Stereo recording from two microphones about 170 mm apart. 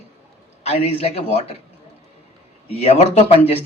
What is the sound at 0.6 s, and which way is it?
Speech, 40° left (ahead or behind).